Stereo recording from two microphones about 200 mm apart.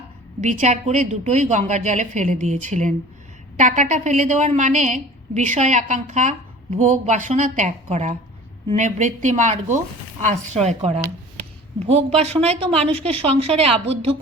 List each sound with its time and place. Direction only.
0.4 s a woman's voice: 35° right (ahead or behind)